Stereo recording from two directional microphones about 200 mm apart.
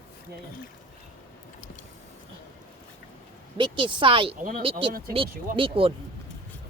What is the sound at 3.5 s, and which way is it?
Speech, 25° right (ahead or behind).